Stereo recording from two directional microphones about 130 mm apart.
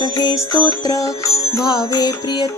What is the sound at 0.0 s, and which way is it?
Music, 30° left (ahead or behind).